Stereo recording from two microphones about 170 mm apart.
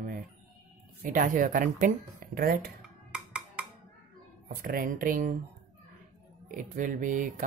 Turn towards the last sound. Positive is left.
turn(degrees=-50)  # may be behind; listen again after turning